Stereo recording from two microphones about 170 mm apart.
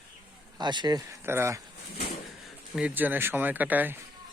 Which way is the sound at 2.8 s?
10° right (ahead or behind).